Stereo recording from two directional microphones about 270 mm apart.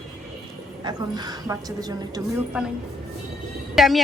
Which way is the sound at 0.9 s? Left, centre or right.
Centre.